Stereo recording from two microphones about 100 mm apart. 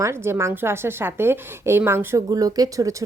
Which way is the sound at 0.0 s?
25° right (ahead or behind).